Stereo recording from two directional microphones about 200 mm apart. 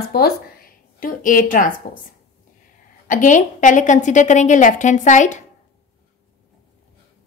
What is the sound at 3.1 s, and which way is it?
A woman's voice, 40° left (ahead or behind).